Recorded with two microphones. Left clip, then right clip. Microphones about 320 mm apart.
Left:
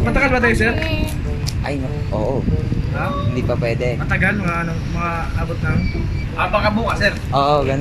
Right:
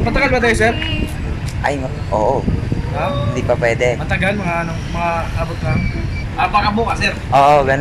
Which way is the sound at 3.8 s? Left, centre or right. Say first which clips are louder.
Right 3 dB; centre.